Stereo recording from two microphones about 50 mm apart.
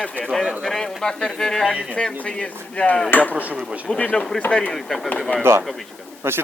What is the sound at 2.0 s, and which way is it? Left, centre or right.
Speech, left.